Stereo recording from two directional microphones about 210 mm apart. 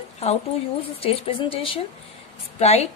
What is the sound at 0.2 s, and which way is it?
A woman's voice, 30° left (ahead or behind).